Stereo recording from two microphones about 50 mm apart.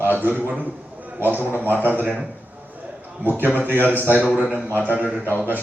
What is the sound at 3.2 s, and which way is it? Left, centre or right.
Speech, right.